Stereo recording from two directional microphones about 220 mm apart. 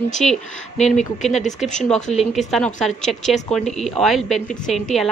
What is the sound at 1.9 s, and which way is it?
Speech, 35° left (ahead or behind).